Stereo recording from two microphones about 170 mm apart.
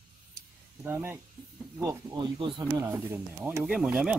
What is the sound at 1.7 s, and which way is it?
Speech, 25° right (ahead or behind).